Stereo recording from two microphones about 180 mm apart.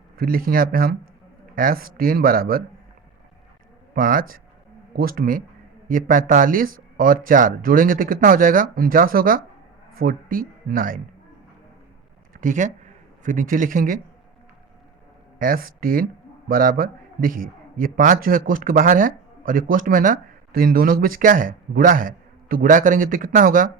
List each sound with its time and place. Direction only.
0.2 s a man's voice: 55° right (ahead or behind)
3.9 s a man's voice: 50° right (ahead or behind)
12.3 s speech: 45° right (ahead or behind)
15.4 s a man's voice: 50° right (ahead or behind)